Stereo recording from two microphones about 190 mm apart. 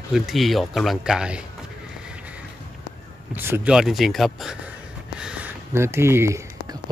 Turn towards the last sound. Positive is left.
turn(degrees=-20)  # may be behind; listen again after turning